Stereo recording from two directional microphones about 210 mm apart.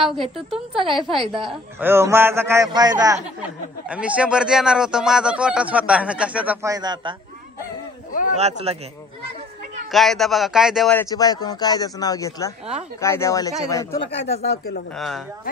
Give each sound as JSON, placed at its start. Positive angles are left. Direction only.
{"t": 0.0, "sound": "a man's voice", "side_deg": 0}
{"t": 3.9, "sound": "a man's voice", "side_deg": -5}
{"t": 8.1, "sound": "a sound", "side_deg": 40}
{"t": 8.4, "sound": "speech", "side_deg": -30}
{"t": 9.8, "sound": "speech", "side_deg": 0}
{"t": 14.0, "sound": "speech", "side_deg": 30}
{"t": 14.4, "sound": "speech", "side_deg": 50}
{"t": 15.0, "sound": "a man's voice", "side_deg": 0}